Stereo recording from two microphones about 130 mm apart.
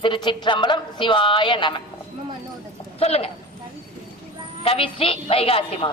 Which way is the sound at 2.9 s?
50° left (ahead or behind).